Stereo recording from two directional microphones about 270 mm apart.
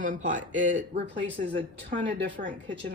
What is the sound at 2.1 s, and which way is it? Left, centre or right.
Speech, right.